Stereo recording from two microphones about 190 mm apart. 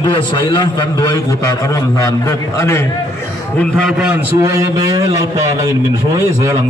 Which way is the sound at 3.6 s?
Centre (ahead or behind).